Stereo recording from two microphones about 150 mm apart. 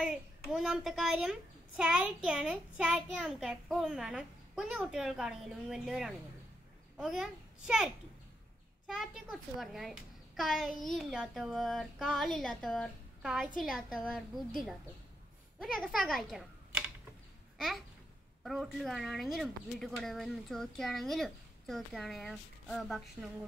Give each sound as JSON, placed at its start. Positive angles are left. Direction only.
{"t": 0.0, "sound": "a child's voice", "side_deg": -5}
{"t": 15.6, "sound": "a child's voice", "side_deg": 0}
{"t": 17.6, "sound": "babbling", "side_deg": 0}
{"t": 18.4, "sound": "a child's voice", "side_deg": 0}